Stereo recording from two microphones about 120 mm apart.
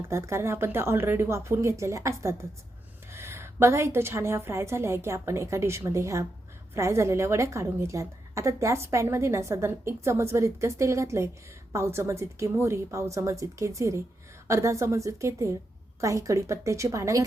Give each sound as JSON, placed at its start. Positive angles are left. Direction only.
{"t": 0.0, "sound": "a woman's voice", "side_deg": -20}